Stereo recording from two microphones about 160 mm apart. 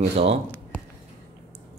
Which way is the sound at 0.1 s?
40° right (ahead or behind).